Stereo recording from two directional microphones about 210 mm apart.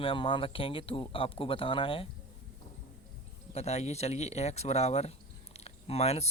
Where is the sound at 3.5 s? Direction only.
30° left (ahead or behind).